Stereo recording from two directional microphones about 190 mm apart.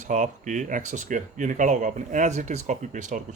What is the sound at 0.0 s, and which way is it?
Speech, 40° right (ahead or behind).